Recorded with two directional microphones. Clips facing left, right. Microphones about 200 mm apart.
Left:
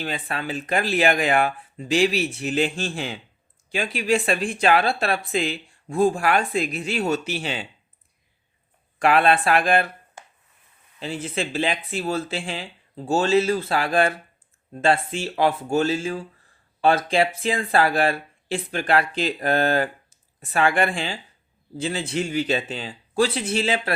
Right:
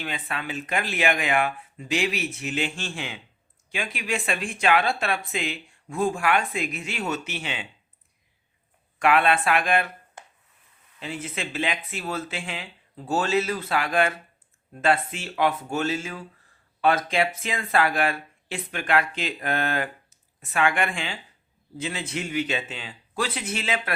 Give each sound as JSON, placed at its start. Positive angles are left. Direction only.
{"t": 0.0, "sound": "speech", "side_deg": 35}
{"t": 9.0, "sound": "speech", "side_deg": 35}
{"t": 11.0, "sound": "speech", "side_deg": 30}